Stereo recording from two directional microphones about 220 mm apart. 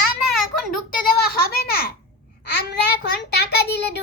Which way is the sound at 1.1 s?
45° left (ahead or behind).